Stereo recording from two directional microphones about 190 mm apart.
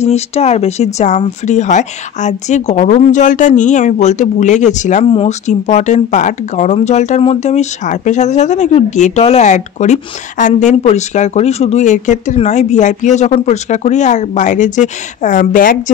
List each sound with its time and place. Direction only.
0.0 s speech: 35° left (ahead or behind)